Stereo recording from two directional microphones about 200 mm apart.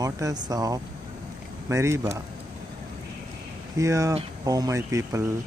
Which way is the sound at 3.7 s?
15° right (ahead or behind).